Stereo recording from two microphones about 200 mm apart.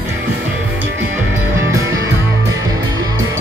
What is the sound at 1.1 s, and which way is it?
Music, 15° right (ahead or behind).